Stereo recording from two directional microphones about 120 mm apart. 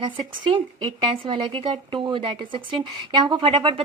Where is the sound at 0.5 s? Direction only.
45° right (ahead or behind).